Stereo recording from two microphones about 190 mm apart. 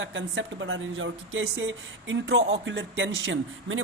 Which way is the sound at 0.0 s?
80° right.